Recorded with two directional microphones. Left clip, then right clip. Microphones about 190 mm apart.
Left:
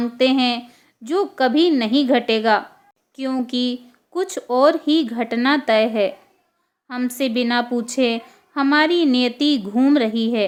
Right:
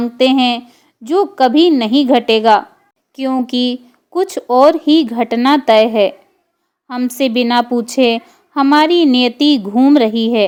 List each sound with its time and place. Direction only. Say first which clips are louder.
0.0 s a woman's voice: right 5 dB; 25° right (ahead or behind)